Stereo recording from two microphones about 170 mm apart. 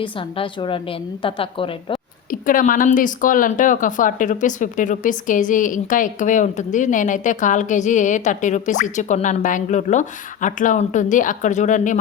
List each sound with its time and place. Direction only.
0.0 s a woman's voice: 30° left (ahead or behind)
2.5 s speech: 55° left (ahead or behind)